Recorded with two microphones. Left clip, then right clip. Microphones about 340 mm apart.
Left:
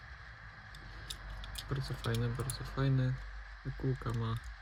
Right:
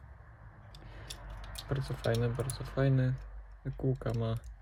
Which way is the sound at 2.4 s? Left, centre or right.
Right.